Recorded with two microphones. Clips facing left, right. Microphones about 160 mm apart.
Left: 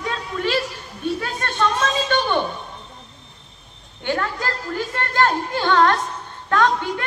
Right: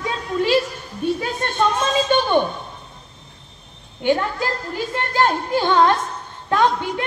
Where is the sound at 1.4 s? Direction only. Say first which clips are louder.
Right 1 dB; 15° right (ahead or behind).